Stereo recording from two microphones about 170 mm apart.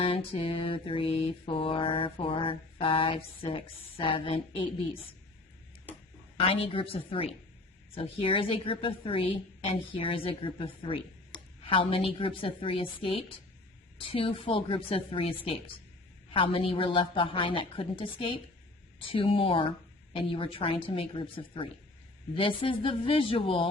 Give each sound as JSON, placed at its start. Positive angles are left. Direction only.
{"t": 0.0, "sound": "a woman's voice", "side_deg": 30}
{"t": 6.3, "sound": "a woman's voice", "side_deg": 35}